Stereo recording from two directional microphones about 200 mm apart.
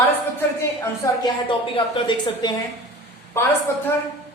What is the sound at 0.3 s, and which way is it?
A man's voice, 15° left (ahead or behind).